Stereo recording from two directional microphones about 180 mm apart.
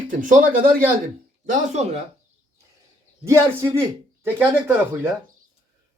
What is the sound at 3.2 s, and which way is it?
Speech, 15° right (ahead or behind).